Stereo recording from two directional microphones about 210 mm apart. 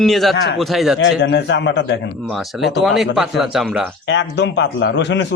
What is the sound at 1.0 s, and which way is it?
A man's voice, 60° left (ahead or behind).